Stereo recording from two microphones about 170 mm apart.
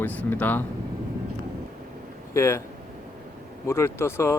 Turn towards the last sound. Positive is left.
turn(degrees=15)  # may be behind; listen again after turning